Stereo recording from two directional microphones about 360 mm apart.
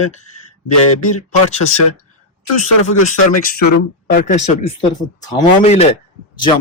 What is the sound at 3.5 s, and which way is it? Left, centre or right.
Speech, left.